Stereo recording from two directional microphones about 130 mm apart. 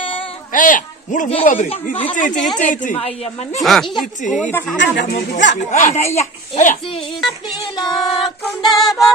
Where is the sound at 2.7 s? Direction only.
80° left.